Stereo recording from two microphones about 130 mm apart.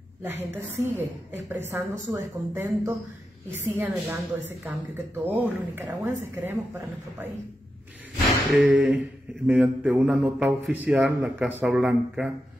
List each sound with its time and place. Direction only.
0.2 s a woman's voice: 15° right (ahead or behind)
8.6 s a woman's voice: 10° right (ahead or behind)